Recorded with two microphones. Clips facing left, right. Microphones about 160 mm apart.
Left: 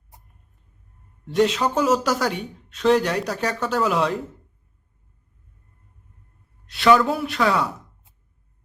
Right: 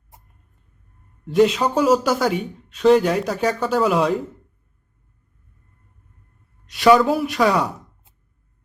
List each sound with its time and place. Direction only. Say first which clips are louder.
1.3 s speech: right 3 dB; 5° right (ahead or behind)
7.0 s speech: right 4 dB; 5° right (ahead or behind)
7.3 s speech: right 3 dB; 15° right (ahead or behind)